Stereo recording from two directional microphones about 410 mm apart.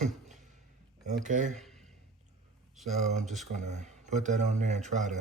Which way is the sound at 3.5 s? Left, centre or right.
Centre.